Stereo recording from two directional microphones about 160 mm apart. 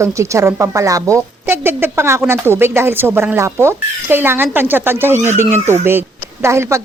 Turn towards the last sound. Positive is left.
turn(degrees=-15)  # may be behind; listen again after turning